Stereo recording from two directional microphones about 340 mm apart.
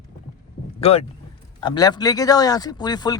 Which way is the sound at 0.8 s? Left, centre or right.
Centre.